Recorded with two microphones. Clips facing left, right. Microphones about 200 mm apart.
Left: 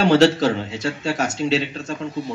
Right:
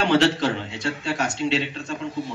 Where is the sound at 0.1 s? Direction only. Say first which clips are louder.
Left 3 dB; 40° left (ahead or behind).